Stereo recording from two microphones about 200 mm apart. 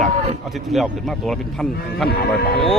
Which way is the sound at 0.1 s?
35° right (ahead or behind).